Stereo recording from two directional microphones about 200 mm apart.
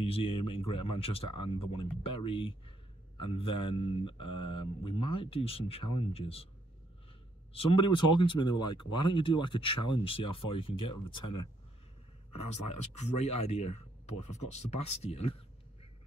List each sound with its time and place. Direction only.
0.0 s speech: 30° left (ahead or behind)
7.5 s speech: 25° left (ahead or behind)
13.2 s speech: 30° left (ahead or behind)